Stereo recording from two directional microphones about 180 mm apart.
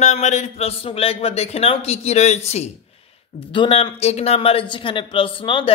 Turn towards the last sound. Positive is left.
turn(degrees=30)  # may be behind; listen again after turning